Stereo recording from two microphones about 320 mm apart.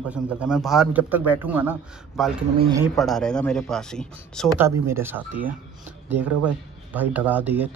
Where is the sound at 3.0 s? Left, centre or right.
Centre.